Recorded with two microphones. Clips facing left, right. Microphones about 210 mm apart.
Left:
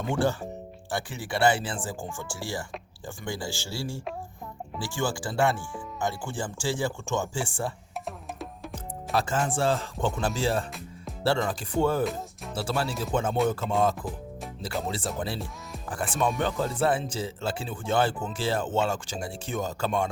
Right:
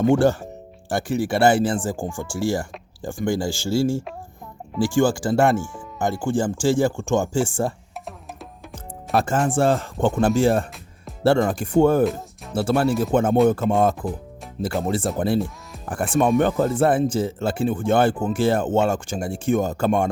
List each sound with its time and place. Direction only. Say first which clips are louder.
0.0 s speech: right 9 dB; 45° right (ahead or behind)
9.1 s speech: right 7 dB; 50° right (ahead or behind)
16.4 s speech: right 8 dB; 55° right (ahead or behind)